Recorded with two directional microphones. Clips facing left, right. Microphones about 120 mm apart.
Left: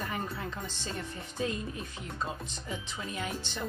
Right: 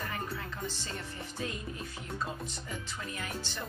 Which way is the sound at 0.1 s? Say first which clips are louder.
Left 2 dB; 20° left (ahead or behind).